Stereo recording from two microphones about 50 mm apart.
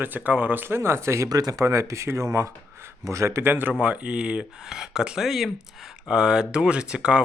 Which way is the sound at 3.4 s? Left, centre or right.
Right.